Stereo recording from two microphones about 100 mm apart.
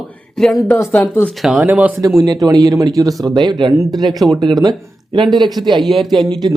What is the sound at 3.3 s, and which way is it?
Speech, 45° right (ahead or behind).